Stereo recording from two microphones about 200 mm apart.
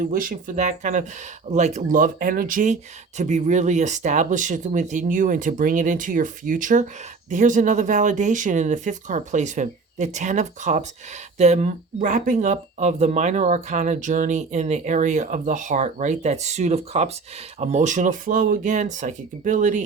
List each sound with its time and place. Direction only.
0.0 s speech: 45° right (ahead or behind)